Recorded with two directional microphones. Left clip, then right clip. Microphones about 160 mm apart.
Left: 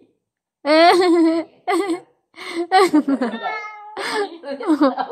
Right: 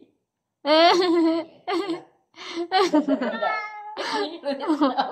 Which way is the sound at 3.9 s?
25° left (ahead or behind).